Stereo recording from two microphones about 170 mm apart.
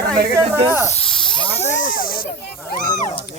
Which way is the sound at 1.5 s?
45° left (ahead or behind).